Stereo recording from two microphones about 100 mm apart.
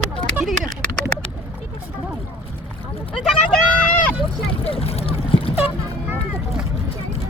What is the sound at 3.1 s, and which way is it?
Speech, 5° left (ahead or behind).